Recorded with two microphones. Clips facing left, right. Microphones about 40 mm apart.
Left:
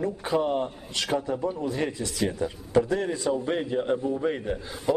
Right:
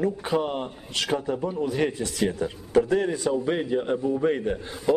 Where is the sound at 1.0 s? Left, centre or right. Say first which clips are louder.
Right 1 dB; centre.